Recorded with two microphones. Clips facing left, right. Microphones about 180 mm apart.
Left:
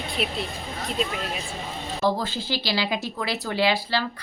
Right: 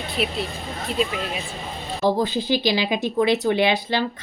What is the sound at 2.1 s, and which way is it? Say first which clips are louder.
Speech: right 7 dB; 15° right (ahead or behind).